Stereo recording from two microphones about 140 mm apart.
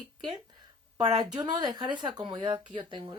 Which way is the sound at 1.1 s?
30° right (ahead or behind).